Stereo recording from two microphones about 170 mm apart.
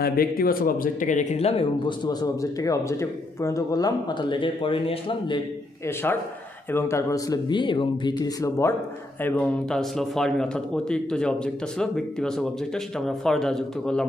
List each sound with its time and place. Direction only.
0.0 s speech: 60° left (ahead or behind); by 2.0 s 35° left (ahead or behind)
2.0 s speech: 20° left (ahead or behind)
6.0 s a man's voice: 10° left (ahead or behind)